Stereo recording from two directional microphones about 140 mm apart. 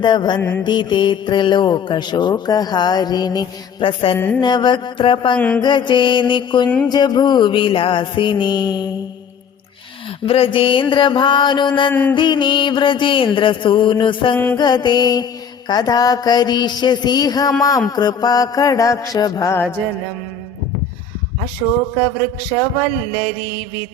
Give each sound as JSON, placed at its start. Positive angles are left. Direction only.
{"t": 0.0, "sound": "speech", "side_deg": 30}
{"t": 5.4, "sound": "mantra", "side_deg": 10}
{"t": 5.6, "sound": "speech", "side_deg": 35}
{"t": 10.2, "sound": "speech", "side_deg": 40}
{"t": 11.9, "sound": "mantra", "side_deg": 15}
{"t": 12.1, "sound": "speech", "side_deg": 35}
{"t": 14.5, "sound": "mantra", "side_deg": 30}